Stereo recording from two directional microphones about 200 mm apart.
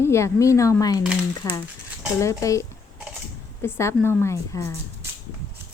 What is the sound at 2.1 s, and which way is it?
Speech, 15° left (ahead or behind).